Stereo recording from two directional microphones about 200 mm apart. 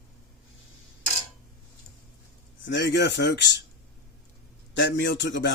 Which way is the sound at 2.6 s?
60° left (ahead or behind).